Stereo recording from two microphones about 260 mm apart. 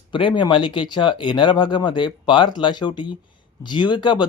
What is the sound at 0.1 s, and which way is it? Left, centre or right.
Speech, centre.